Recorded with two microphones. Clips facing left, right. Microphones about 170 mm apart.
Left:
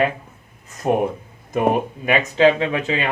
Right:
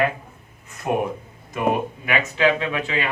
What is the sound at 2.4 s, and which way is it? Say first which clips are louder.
Speech: left 5 dB; 30° left (ahead or behind).